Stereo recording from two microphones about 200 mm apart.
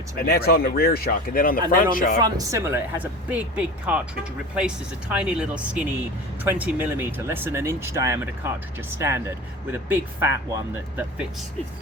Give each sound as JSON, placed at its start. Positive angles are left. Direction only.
{"t": 0.2, "sound": "speech", "side_deg": 50}
{"t": 2.2, "sound": "speech", "side_deg": -15}